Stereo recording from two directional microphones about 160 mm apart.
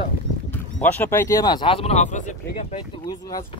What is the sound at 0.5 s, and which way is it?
Speech, 10° left (ahead or behind).